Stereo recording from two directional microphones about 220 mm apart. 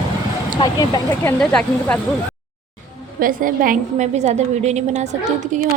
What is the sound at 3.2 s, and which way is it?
A woman's voice, 40° right (ahead or behind).